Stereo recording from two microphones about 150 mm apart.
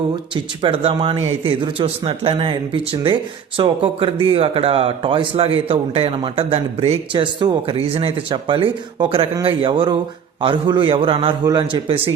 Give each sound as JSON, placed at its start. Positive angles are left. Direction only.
{"t": 0.6, "sound": "a man's voice", "side_deg": -40}